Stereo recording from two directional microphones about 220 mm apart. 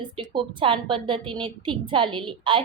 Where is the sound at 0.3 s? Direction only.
25° right (ahead or behind).